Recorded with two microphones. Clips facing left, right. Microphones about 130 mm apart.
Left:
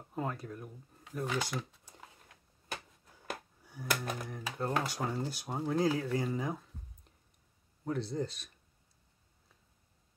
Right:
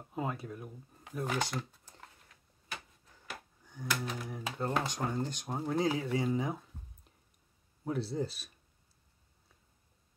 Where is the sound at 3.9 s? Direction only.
50° left (ahead or behind).